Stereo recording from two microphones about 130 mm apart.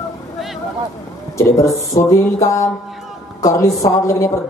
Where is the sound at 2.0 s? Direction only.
25° left (ahead or behind).